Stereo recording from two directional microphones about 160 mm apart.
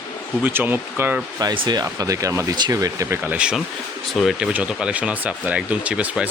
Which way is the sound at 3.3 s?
5° right (ahead or behind).